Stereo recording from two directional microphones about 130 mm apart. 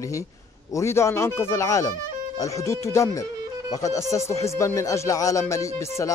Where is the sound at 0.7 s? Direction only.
20° left (ahead or behind).